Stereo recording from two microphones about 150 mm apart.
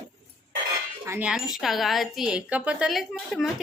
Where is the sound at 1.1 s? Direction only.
10° right (ahead or behind).